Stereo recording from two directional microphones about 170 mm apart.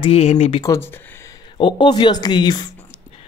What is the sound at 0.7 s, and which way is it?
Speech, 15° left (ahead or behind).